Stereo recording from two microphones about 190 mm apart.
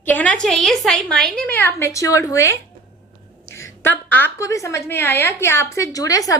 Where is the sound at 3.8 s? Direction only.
10° left (ahead or behind).